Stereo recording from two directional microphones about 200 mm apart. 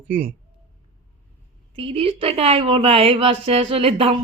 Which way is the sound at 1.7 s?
30° right (ahead or behind).